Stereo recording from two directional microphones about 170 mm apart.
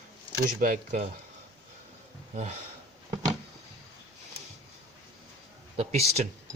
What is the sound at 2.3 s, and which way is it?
Speech, 40° right (ahead or behind).